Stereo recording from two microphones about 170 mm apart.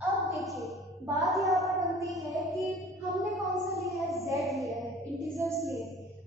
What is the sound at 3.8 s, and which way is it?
Child singing, centre (ahead or behind).